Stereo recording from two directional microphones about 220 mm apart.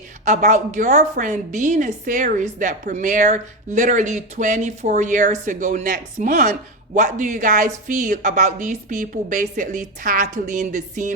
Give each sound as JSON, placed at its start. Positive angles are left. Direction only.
{"t": 0.3, "sound": "a woman's voice", "side_deg": -35}